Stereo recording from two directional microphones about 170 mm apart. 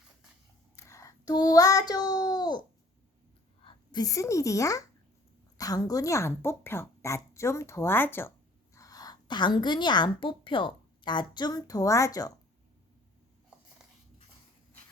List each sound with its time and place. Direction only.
0.9 s child singing: 20° left (ahead or behind)
3.6 s a woman's voice: 30° left (ahead or behind)